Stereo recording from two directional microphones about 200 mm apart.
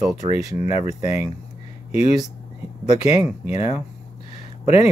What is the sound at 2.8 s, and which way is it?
Speech, 30° left (ahead or behind).